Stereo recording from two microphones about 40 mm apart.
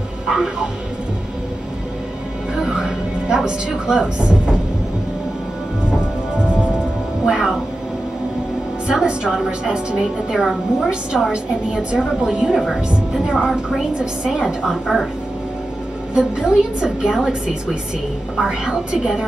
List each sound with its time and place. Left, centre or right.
0.3 s a woman's voice: centre
2.6 s a woman's voice: centre
7.2 s music: centre
8.8 s a woman's voice: right
10.4 s a woman's voice: centre
12.0 s a woman's voice: centre
12.4 s a woman's voice: centre
16.2 s a woman's voice: centre
18.4 s a woman's voice: centre